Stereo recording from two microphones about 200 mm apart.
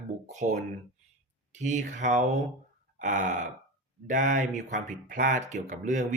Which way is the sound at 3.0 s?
40° right (ahead or behind).